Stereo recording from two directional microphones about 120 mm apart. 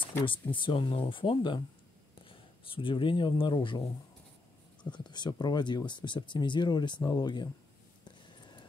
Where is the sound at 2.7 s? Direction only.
45° left (ahead or behind).